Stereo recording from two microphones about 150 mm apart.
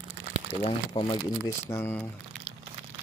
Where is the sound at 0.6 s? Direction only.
35° left (ahead or behind).